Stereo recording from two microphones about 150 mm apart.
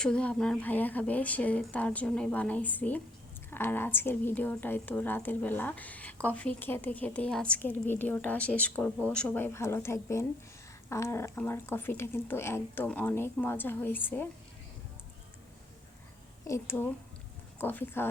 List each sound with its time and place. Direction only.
0.0 s a woman's voice: 5° left (ahead or behind)
16.4 s a woman's voice: 20° left (ahead or behind)